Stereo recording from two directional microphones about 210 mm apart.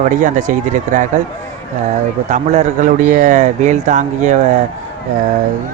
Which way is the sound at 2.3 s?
35° right (ahead or behind).